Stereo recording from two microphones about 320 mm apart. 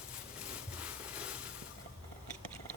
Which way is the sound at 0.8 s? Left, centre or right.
Centre.